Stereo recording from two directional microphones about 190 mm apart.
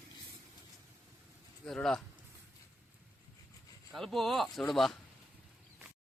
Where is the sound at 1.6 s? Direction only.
5° left (ahead or behind).